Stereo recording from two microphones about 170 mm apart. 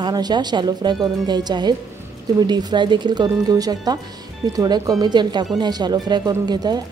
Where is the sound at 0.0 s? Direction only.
25° right (ahead or behind).